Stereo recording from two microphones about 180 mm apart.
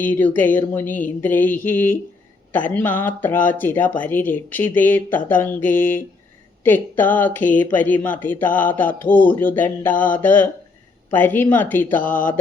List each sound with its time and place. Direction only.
0.1 s speech: 10° left (ahead or behind)
11.9 s speech: 50° left (ahead or behind)